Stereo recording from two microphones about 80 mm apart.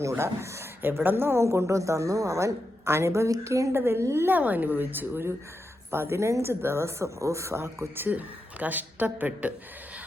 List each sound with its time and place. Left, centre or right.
0.0 s speech: right
4.4 s speech: right